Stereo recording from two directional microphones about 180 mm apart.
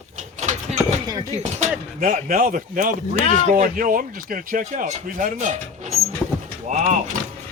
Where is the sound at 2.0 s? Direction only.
50° right (ahead or behind).